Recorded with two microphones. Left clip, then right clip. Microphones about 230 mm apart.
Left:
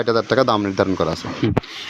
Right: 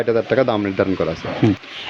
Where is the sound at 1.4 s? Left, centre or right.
Right.